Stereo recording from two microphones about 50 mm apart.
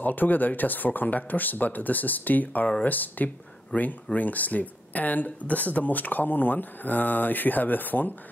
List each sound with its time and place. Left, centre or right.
0.0 s speech: left